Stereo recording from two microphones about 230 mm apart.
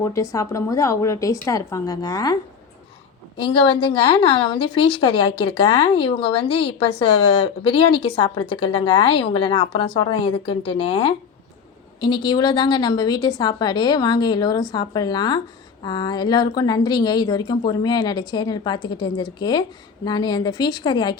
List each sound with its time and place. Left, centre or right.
0.0 s a woman's voice: centre
3.4 s a woman's voice: left